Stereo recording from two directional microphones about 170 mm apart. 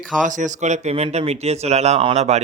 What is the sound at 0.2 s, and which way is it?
Speech, 50° right (ahead or behind).